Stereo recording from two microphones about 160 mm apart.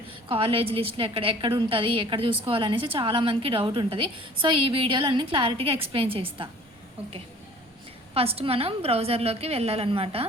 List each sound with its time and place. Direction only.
0.3 s a woman's voice: 35° right (ahead or behind)
8.1 s a woman's voice: 40° right (ahead or behind)